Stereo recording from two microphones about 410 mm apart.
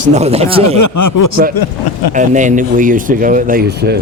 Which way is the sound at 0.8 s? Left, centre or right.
Left.